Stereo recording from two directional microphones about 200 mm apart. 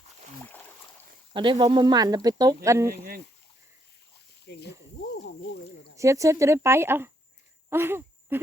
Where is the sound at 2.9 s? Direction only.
50° right (ahead or behind).